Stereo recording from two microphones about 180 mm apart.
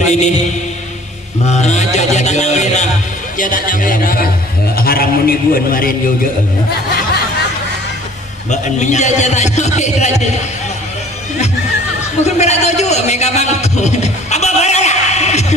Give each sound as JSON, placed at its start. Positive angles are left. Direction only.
{"t": 0.0, "sound": "mantra", "side_deg": 40}
{"t": 1.5, "sound": "music", "side_deg": 40}
{"t": 3.3, "sound": "a man's voice", "side_deg": 50}
{"t": 8.5, "sound": "a man's voice", "side_deg": 40}
{"t": 12.2, "sound": "a sound", "side_deg": 40}